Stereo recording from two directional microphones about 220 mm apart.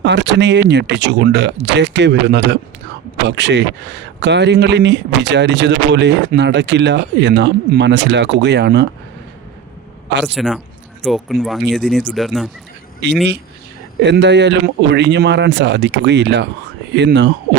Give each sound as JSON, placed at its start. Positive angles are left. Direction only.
{"t": 0.0, "sound": "speech", "side_deg": -50}
{"t": 10.1, "sound": "speech", "side_deg": -50}
{"t": 10.3, "sound": "speech", "side_deg": 0}
{"t": 14.0, "sound": "speech", "side_deg": -50}